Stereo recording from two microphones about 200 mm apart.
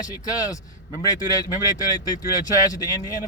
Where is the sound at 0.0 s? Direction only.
20° left (ahead or behind).